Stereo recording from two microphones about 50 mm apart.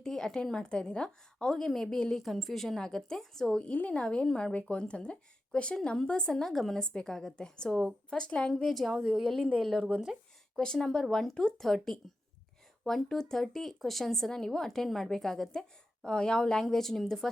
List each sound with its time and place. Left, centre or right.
0.0 s a woman's voice: centre
3.6 s a woman's voice: left; by 6.7 s centre
6.7 s speech: centre
8.5 s a woman's voice: centre
10.6 s speech: centre
16.0 s speech: centre